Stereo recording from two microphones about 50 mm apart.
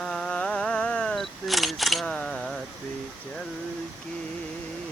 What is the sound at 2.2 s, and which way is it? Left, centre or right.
Tick, left.